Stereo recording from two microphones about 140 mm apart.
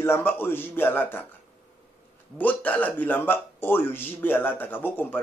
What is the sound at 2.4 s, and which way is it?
Speech, 10° left (ahead or behind).